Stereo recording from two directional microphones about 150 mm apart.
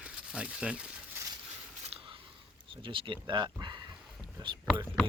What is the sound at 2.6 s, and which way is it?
Speech, 35° right (ahead or behind).